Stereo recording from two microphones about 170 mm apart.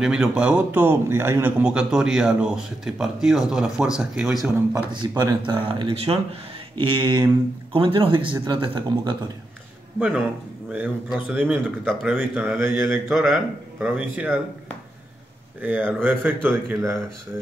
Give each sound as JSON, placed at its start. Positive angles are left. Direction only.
{"t": 0.0, "sound": "a man's voice", "side_deg": -5}
{"t": 4.9, "sound": "speech", "side_deg": -25}
{"t": 10.7, "sound": "a man's voice", "side_deg": -10}
{"t": 12.8, "sound": "a man's voice", "side_deg": 0}
{"t": 15.6, "sound": "speech", "side_deg": -10}